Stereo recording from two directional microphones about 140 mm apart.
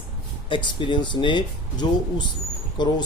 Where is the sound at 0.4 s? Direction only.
35° left (ahead or behind).